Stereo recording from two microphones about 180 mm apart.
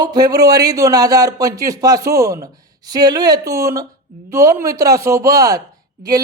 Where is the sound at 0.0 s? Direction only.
20° right (ahead or behind).